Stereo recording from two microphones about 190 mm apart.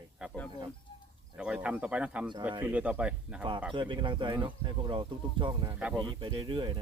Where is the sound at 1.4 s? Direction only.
5° right (ahead or behind).